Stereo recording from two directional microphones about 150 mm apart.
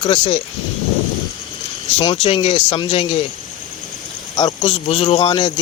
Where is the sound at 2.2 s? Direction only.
45° left (ahead or behind).